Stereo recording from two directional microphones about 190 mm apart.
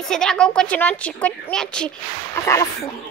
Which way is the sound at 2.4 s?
15° left (ahead or behind).